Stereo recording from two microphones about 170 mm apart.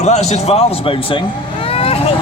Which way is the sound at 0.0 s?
40° left (ahead or behind).